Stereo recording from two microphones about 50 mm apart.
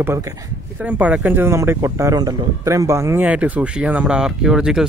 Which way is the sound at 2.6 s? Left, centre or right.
Right.